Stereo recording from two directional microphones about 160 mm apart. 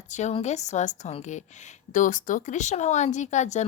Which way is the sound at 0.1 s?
45° left (ahead or behind).